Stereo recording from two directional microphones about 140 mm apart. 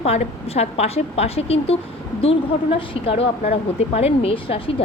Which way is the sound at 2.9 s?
45° left (ahead or behind).